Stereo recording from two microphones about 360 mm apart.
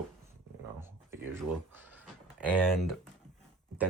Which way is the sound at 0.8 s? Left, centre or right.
Centre.